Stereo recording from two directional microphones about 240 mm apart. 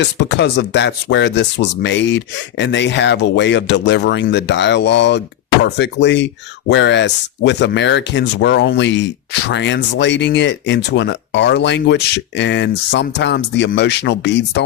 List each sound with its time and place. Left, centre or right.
0.0 s speech: left